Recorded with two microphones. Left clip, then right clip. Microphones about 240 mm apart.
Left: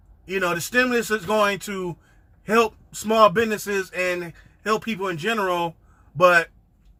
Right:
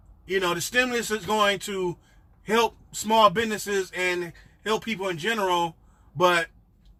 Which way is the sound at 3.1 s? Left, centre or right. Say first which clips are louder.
Left 3 dB; centre.